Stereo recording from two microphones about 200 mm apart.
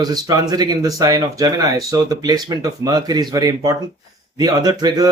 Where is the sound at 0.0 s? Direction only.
20° right (ahead or behind).